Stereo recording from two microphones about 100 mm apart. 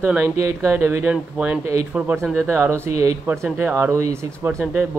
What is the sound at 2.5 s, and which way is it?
Speech, 25° right (ahead or behind).